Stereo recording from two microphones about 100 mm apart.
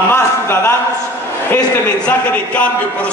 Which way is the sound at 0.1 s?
25° left (ahead or behind).